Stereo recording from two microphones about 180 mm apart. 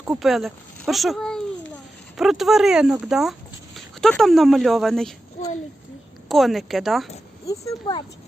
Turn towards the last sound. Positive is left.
turn(degrees=20)  # may be behind; listen again after turning